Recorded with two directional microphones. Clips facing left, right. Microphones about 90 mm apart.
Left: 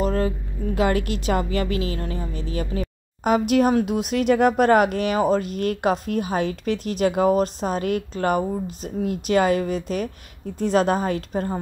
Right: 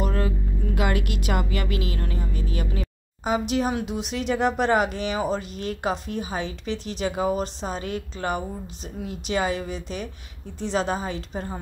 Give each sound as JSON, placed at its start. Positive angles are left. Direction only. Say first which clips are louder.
{"t": 0.0, "sound": "vehicle", "louder": "left 5 dB", "side_deg": 35}
{"t": 0.7, "sound": "a woman's voice", "louder": "left 5 dB", "side_deg": 35}
{"t": 3.3, "sound": "speech", "louder": "left 6 dB", "side_deg": 55}